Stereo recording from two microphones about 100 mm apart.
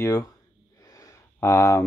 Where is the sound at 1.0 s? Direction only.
30° left (ahead or behind).